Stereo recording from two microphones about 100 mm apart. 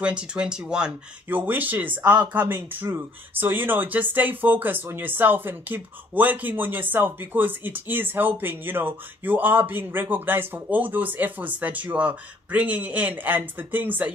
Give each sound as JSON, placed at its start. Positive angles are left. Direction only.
{"t": 0.0, "sound": "speech", "side_deg": -10}